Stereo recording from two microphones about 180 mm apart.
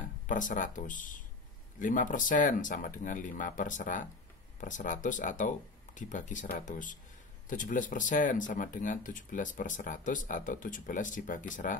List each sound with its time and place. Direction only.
0.3 s speech: 45° left (ahead or behind)